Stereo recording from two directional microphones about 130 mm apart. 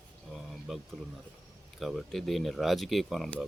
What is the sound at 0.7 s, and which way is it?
Speech, centre (ahead or behind).